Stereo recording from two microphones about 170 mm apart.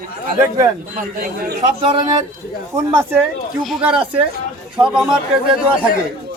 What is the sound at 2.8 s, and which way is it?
Speech, 20° right (ahead or behind).